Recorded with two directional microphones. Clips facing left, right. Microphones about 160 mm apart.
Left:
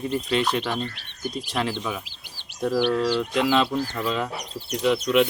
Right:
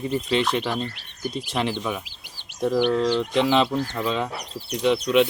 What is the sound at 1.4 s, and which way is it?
Speech, 15° right (ahead or behind).